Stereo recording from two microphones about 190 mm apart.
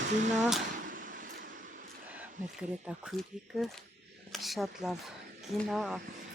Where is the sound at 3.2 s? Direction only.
5° left (ahead or behind).